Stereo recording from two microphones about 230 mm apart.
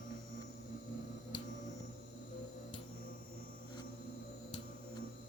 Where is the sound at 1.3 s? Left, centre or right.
Left.